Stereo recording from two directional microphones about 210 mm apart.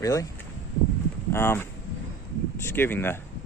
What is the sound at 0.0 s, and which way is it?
Speech, 15° left (ahead or behind).